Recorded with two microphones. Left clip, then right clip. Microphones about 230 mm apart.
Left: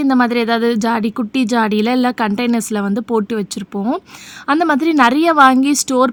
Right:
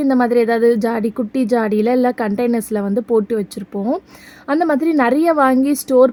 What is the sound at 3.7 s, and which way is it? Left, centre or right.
Speech, left.